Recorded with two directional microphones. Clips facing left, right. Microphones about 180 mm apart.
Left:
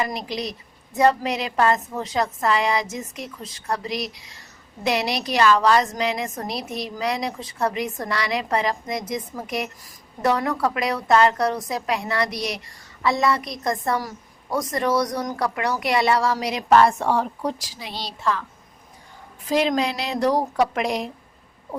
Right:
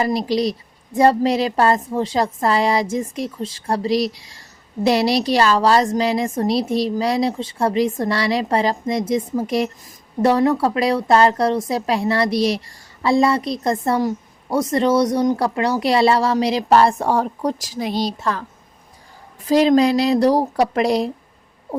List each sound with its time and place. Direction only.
0.0 s a woman's voice: 35° right (ahead or behind)
19.5 s a woman's voice: 35° right (ahead or behind)